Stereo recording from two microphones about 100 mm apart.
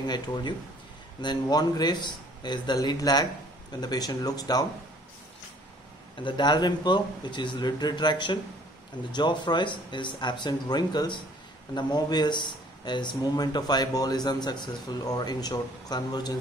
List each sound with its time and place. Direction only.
0.0 s speech: 45° left (ahead or behind)
6.2 s speech: 50° left (ahead or behind)